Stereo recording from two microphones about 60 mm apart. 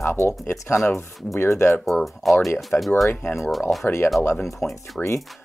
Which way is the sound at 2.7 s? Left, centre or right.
Left.